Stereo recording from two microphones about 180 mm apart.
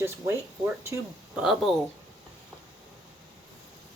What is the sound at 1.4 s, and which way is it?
Speech, centre (ahead or behind).